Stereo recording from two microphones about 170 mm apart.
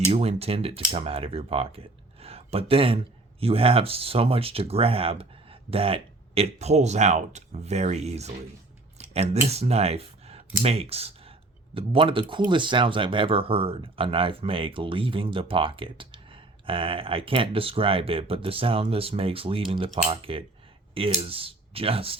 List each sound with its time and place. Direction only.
0.1 s speech: 35° right (ahead or behind)